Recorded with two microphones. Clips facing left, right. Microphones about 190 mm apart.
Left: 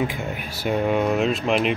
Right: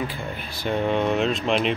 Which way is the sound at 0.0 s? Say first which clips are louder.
Left 4 dB; 10° left (ahead or behind).